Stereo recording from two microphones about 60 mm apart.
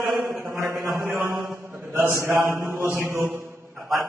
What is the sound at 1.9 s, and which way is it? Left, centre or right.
Speech, right.